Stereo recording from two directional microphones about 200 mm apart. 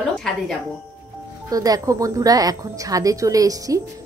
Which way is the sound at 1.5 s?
20° right (ahead or behind).